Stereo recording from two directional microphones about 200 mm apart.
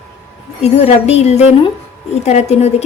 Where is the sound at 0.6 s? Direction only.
30° left (ahead or behind).